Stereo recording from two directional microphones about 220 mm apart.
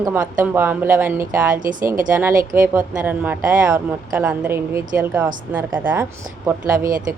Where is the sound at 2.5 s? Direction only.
10° right (ahead or behind).